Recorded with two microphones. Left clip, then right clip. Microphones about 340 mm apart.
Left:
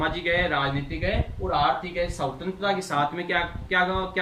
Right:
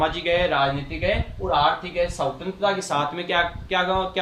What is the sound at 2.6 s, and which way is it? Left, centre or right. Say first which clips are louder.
Speech: right 2 dB; centre.